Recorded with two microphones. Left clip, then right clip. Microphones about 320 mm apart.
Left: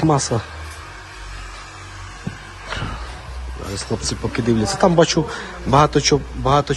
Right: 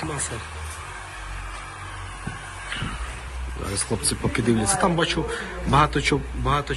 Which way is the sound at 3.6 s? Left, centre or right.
Centre.